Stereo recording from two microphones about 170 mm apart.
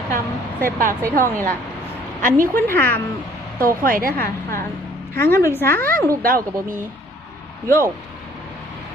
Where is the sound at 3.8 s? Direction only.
55° right (ahead or behind).